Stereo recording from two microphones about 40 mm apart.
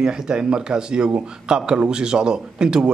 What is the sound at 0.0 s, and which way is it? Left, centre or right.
A man's voice, right.